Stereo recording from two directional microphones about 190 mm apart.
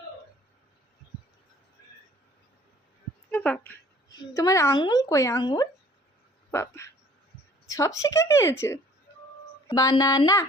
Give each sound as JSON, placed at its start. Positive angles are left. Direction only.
{"t": 3.3, "sound": "a woman's voice", "side_deg": 5}